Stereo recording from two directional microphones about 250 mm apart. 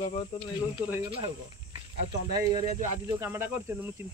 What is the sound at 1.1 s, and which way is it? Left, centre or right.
Cricket, centre.